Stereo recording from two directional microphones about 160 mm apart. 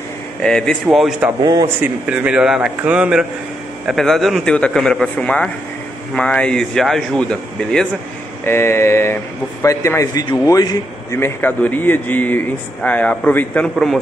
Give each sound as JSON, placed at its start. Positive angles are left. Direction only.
{"t": 0.4, "sound": "speech", "side_deg": 5}
{"t": 1.4, "sound": "speech", "side_deg": -25}
{"t": 1.8, "sound": "a man's voice", "side_deg": -5}